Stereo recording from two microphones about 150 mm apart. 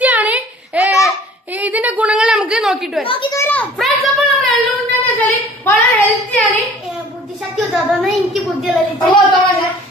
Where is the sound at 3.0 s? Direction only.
35° left (ahead or behind).